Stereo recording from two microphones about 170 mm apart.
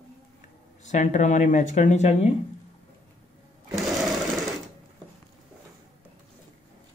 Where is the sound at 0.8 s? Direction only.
45° left (ahead or behind).